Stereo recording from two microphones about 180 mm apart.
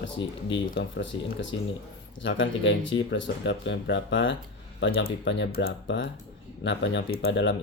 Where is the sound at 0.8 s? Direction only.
90° left.